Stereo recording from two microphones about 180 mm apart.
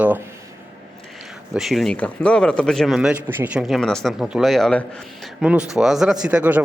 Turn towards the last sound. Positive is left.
turn(degrees=-10)  # may be behind; listen again after turning